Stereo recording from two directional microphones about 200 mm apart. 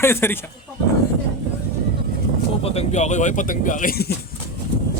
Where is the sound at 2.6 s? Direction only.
35° left (ahead or behind).